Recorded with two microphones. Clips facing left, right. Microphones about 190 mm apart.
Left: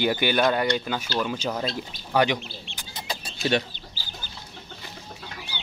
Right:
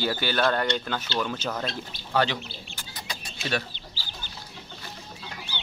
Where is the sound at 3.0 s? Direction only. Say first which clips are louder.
Left 7 dB; 30° left (ahead or behind).